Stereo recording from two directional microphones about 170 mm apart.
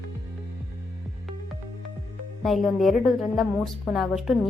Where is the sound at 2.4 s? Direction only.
Centre (ahead or behind).